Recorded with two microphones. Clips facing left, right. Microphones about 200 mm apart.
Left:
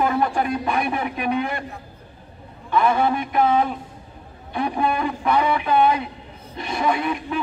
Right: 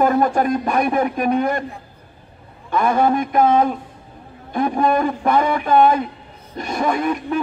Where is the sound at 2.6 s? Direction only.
45° right (ahead or behind).